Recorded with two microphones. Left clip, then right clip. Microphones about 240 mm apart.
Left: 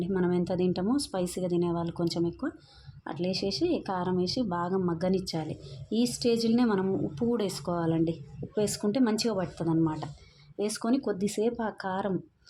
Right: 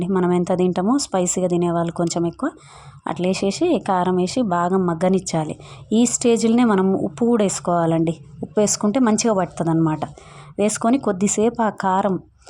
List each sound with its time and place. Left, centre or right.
0.0 s a woman's voice: right